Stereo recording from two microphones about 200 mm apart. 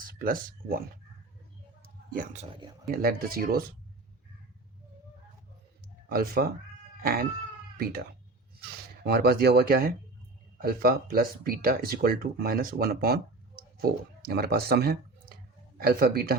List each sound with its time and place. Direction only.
0.2 s speech: 45° right (ahead or behind)
1.8 s a sound: 45° right (ahead or behind)
2.8 s speech: 45° right (ahead or behind)
6.1 s speech: 50° right (ahead or behind)
7.0 s cat: 45° right (ahead or behind)
9.0 s speech: 50° right (ahead or behind)